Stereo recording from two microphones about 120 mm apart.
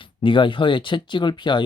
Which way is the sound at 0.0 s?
45° left (ahead or behind).